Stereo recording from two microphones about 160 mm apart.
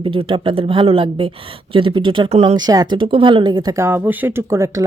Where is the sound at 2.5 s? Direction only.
25° right (ahead or behind).